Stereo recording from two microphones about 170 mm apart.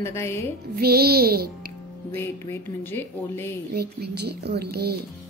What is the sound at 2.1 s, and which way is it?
Speech, 15° left (ahead or behind).